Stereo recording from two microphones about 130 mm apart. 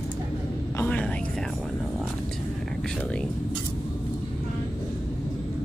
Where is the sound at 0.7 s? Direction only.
10° left (ahead or behind).